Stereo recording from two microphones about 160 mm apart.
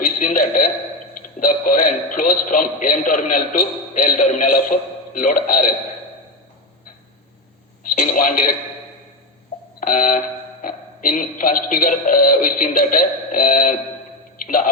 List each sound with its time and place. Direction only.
0.0 s a man's voice: 60° left (ahead or behind)
7.9 s a man's voice: 55° left (ahead or behind)
9.8 s a man's voice: 60° left (ahead or behind)